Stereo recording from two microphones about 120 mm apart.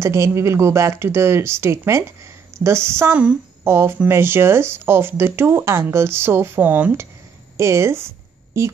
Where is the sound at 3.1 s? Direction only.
10° right (ahead or behind).